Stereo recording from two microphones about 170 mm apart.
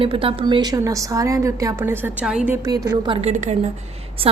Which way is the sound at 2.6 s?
20° right (ahead or behind).